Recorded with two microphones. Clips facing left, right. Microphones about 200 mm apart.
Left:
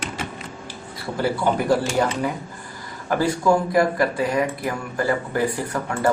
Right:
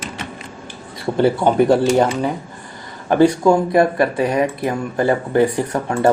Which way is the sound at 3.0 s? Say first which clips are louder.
Right 7 dB; 25° right (ahead or behind).